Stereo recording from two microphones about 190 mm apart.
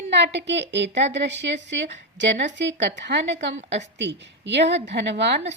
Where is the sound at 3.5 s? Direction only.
35° right (ahead or behind).